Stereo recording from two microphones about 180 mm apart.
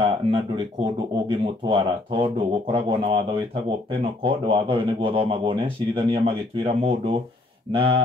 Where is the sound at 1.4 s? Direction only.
30° right (ahead or behind).